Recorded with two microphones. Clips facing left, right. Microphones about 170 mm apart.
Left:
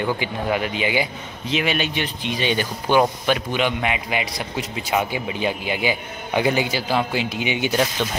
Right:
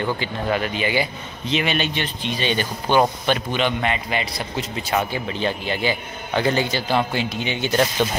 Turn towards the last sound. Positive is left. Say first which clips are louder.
# left 1 dB
turn(degrees=10)  # may be behind; listen again after turning